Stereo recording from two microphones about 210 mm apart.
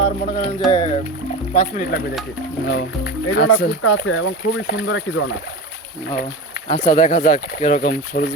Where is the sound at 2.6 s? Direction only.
50° left (ahead or behind).